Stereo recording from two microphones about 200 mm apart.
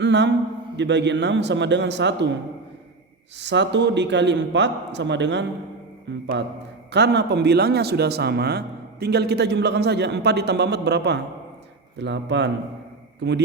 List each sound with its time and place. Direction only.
0.0 s a sound: 60° right (ahead or behind)
0.8 s speech: 60° right (ahead or behind)
3.4 s a man's voice: 60° right (ahead or behind)